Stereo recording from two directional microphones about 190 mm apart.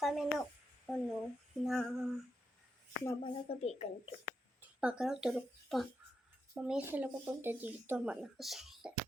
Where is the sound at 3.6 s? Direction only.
35° left (ahead or behind).